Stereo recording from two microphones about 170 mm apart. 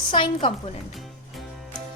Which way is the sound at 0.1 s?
30° left (ahead or behind).